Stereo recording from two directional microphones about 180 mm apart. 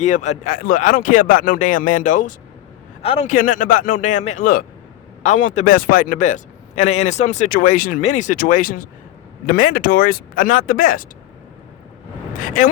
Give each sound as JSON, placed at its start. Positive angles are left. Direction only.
{"t": 0.0, "sound": "a man's voice", "side_deg": 40}
{"t": 3.0, "sound": "a man's voice", "side_deg": 35}
{"t": 3.3, "sound": "a man's voice", "side_deg": 45}
{"t": 12.4, "sound": "vehicle", "side_deg": 50}